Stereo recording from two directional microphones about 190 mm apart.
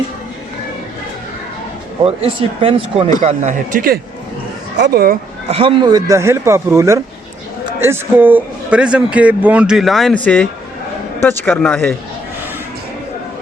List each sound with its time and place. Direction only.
2.0 s speech: 30° right (ahead or behind)
3.2 s a man's voice: 40° right (ahead or behind)
5.5 s a man's voice: 30° right (ahead or behind); by 11.9 s 10° left (ahead or behind)